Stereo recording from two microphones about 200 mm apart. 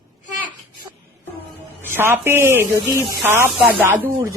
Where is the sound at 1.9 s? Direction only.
10° right (ahead or behind).